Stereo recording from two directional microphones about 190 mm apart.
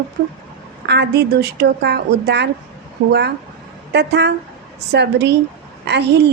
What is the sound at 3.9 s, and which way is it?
A woman's voice, 60° right (ahead or behind).